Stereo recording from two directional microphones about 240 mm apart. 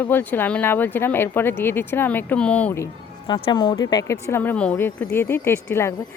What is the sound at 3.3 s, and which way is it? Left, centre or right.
Speech, left.